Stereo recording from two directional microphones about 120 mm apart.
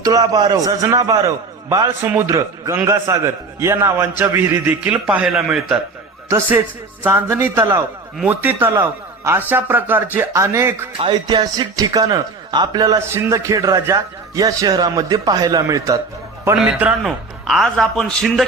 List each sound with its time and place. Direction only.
0.0 s a man's voice: 30° right (ahead or behind); by 5.8 s 5° right (ahead or behind)
6.2 s a man's voice: 20° right (ahead or behind)
11.1 s a man's voice: 35° right (ahead or behind)
16.6 s a man's voice: 10° right (ahead or behind)